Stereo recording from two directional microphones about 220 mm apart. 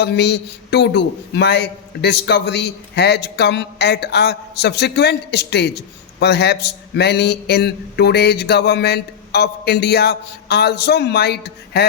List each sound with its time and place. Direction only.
0.0 s a man's voice: 50° left (ahead or behind)